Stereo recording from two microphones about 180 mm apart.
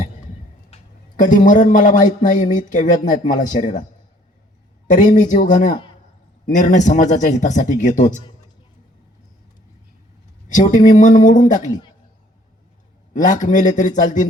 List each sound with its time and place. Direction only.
0.7 s a man's voice: 45° left (ahead or behind)
4.9 s a man's voice: 45° left (ahead or behind)
10.5 s a man's voice: 45° left (ahead or behind)
13.1 s a man's voice: 45° left (ahead or behind)